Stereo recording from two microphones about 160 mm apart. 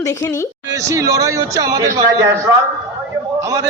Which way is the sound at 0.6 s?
20° right (ahead or behind).